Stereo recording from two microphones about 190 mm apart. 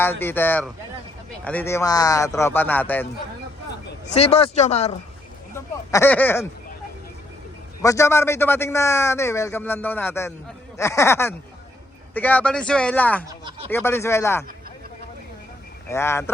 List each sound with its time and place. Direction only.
0.0 s a man's voice: 10° left (ahead or behind)
4.1 s speech: 30° left (ahead or behind)
5.9 s a man's voice: 10° left (ahead or behind)
7.8 s a man's voice: 15° left (ahead or behind)
13.2 s speech: 25° right (ahead or behind)
13.7 s a man's voice: 10° left (ahead or behind)
15.9 s a man's voice: 15° left (ahead or behind)